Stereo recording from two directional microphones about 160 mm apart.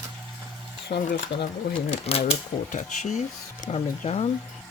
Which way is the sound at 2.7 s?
50° left (ahead or behind).